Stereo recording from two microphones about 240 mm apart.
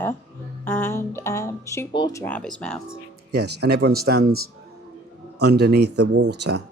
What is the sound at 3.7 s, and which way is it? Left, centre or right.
Speech, right.